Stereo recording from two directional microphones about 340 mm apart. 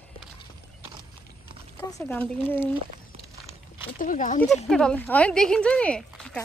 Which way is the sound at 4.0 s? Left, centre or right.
Left.